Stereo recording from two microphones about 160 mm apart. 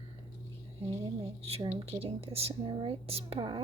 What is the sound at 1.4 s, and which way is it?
Speech, 40° right (ahead or behind).